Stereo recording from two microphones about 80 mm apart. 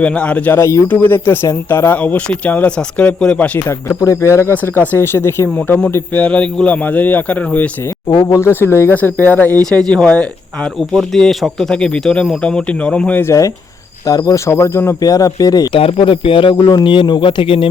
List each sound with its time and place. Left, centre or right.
0.0 s speech: centre
0.6 s speech: left
0.9 s speech: left
2.0 s speech: centre
3.7 s speech: left
4.7 s speech: left
8.2 s speech: left; by 10.2 s centre
10.8 s speech: centre
13.2 s speech: left
15.0 s speech: left
15.7 s speech: left